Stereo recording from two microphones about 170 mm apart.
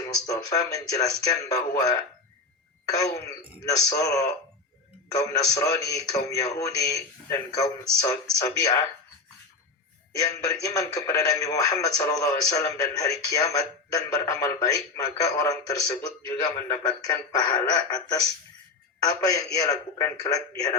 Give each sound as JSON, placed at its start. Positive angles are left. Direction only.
{"t": 0.0, "sound": "speech", "side_deg": 20}
{"t": 10.1, "sound": "speech", "side_deg": 20}